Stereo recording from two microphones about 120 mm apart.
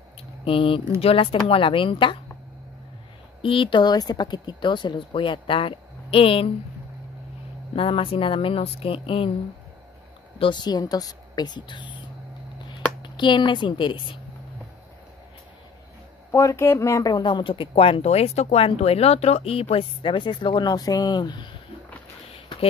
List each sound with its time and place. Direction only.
0.5 s speech: 45° left (ahead or behind)
3.4 s speech: 45° left (ahead or behind)
7.7 s speech: 50° left (ahead or behind)
10.4 s a woman's voice: 40° left (ahead or behind)
13.0 s speech: 40° left (ahead or behind)
16.3 s speech: 25° left (ahead or behind); by 21.5 s 40° left (ahead or behind)